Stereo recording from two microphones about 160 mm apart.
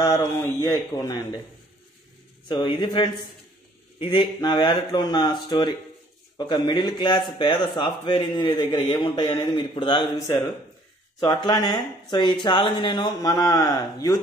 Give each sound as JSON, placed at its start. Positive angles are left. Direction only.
{"t": 0.0, "sound": "speech", "side_deg": 25}
{"t": 2.4, "sound": "speech", "side_deg": 30}
{"t": 11.2, "sound": "speech", "side_deg": 25}